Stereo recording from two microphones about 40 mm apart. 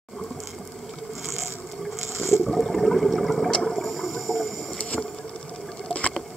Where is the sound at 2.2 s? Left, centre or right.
Centre.